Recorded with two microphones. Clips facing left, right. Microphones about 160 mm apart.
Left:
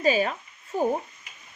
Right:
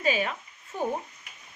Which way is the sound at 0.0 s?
40° left (ahead or behind).